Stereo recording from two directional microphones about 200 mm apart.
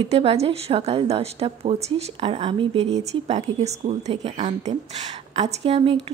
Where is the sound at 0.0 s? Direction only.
30° right (ahead or behind).